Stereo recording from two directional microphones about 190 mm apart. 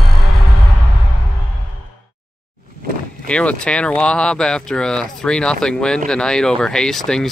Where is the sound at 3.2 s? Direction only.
5° left (ahead or behind).